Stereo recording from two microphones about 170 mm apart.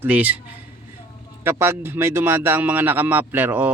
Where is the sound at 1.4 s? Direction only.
15° right (ahead or behind).